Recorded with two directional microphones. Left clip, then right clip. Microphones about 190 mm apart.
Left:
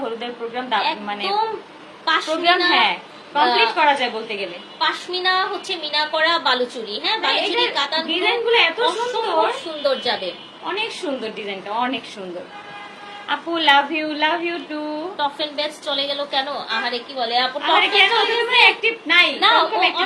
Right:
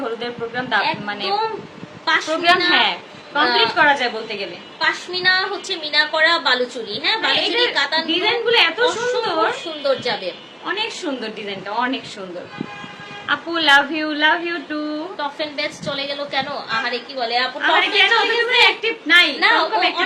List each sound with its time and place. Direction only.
0.2 s a woman's voice: 15° right (ahead or behind)
13.2 s a woman's voice: 15° right (ahead or behind)